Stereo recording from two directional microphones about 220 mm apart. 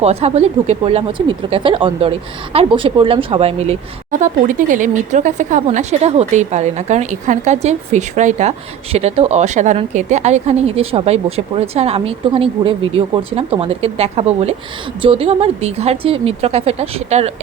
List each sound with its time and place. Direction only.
0.0 s speech: 30° right (ahead or behind)